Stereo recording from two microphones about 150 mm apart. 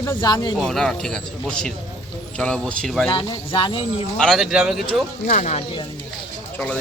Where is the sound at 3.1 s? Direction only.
30° left (ahead or behind).